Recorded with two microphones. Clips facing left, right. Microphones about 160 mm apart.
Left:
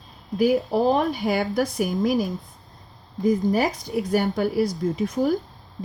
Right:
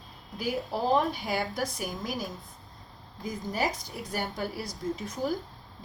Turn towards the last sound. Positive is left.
turn(degrees=60)  # may be behind; listen again after turning